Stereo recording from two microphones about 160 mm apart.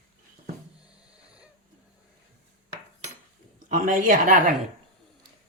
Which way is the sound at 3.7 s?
55° right (ahead or behind).